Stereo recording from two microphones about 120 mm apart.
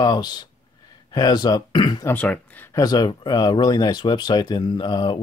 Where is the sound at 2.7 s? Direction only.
35° left (ahead or behind).